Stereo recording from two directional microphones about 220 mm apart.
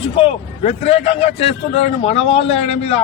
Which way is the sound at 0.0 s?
25° left (ahead or behind).